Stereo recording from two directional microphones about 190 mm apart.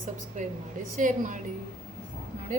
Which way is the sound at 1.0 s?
40° right (ahead or behind).